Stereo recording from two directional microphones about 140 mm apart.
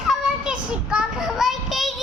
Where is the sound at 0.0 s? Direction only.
5° right (ahead or behind).